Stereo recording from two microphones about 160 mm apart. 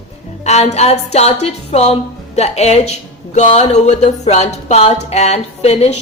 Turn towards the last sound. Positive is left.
turn(degrees=40)  # may be behind; listen again after turning